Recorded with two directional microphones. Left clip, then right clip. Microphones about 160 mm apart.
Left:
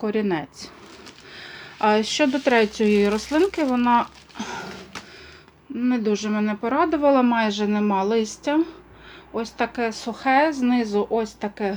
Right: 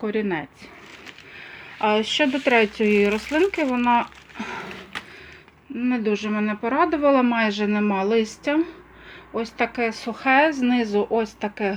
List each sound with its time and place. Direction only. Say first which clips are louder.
0.0 s speech: left 1 dB; 15° left (ahead or behind)
1.4 s speech: left 1 dB; 30° left (ahead or behind); by 11.7 s 5° right (ahead or behind)